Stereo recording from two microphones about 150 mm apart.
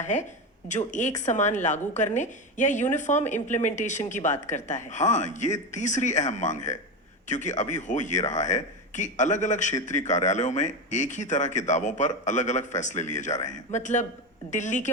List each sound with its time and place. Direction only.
0.0 s speech: 50° left (ahead or behind)